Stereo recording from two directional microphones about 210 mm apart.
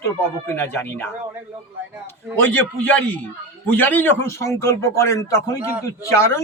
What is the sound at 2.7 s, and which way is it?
Speech, 5° left (ahead or behind).